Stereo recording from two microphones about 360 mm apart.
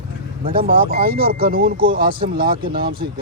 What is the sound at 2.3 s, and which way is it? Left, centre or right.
Speech, right.